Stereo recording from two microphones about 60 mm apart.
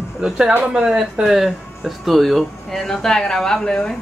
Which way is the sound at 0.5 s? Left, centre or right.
Right.